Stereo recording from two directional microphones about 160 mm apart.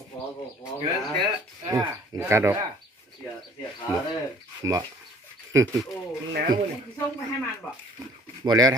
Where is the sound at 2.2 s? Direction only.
15° right (ahead or behind).